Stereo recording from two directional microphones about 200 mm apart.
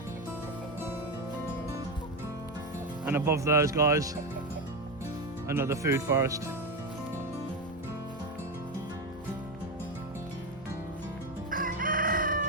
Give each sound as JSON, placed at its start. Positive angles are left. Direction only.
{"t": 3.1, "sound": "speech", "side_deg": -10}
{"t": 5.5, "sound": "speech", "side_deg": -15}
{"t": 11.5, "sound": "chicken", "side_deg": -45}